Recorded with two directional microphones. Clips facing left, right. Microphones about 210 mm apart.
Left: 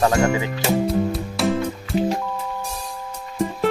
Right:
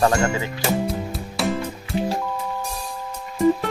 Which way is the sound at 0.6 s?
Centre (ahead or behind).